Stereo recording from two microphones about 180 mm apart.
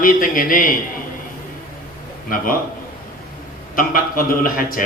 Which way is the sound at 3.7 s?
50° left (ahead or behind).